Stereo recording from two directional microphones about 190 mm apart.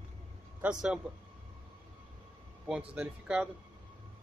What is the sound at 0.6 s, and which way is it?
Speech, 5° right (ahead or behind).